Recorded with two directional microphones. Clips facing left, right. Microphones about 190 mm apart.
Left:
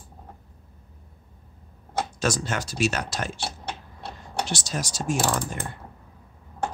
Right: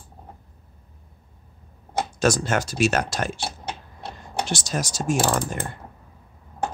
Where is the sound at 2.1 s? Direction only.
45° right (ahead or behind).